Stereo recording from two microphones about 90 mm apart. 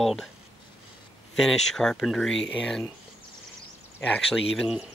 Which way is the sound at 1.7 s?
5° left (ahead or behind).